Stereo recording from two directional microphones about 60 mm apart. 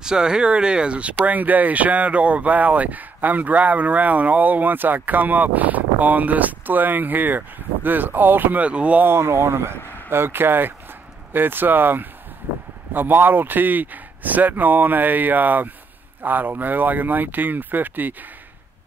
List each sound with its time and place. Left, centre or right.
0.0 s speech: centre; by 8.6 s right
8.6 s speech: right
9.0 s speech: right